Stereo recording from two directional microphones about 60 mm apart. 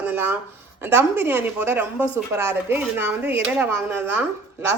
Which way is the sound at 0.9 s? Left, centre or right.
Right.